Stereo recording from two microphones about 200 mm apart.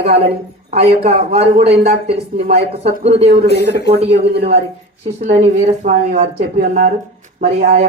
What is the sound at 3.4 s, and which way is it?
Speech, 55° left (ahead or behind).